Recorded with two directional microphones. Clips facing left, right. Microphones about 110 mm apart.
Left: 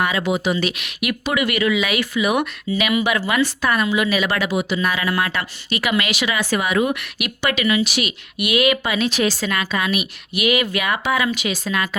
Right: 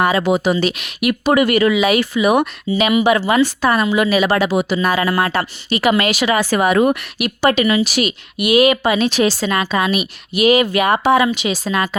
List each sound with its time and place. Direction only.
0.0 s speech: 35° right (ahead or behind)